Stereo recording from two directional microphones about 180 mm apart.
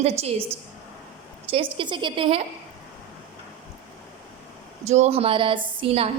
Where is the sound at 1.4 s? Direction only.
30° right (ahead or behind).